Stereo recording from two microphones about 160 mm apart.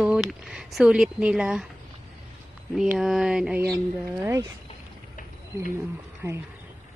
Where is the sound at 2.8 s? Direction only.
5° right (ahead or behind).